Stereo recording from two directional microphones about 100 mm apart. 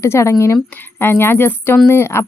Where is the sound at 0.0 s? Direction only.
25° left (ahead or behind).